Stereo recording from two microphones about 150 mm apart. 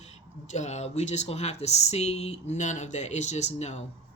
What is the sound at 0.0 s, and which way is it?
Speech, 50° left (ahead or behind).